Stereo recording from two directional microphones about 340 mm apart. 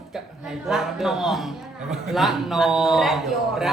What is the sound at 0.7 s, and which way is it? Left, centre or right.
Speech, centre.